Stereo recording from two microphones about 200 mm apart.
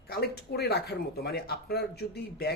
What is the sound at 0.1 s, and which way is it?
Speech, 50° left (ahead or behind).